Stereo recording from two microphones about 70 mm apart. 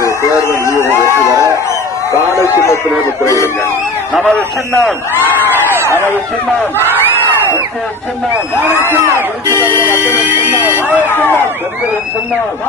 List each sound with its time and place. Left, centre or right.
0.0 s a sound: left
2.3 s speech: left
4.1 s a man's voice: centre
5.5 s a sound: right
8.7 s speech: left
10.2 s buzzer: right
11.1 s speech: left